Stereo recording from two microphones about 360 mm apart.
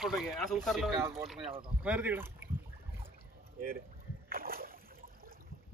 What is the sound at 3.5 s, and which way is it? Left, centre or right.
Speech, right.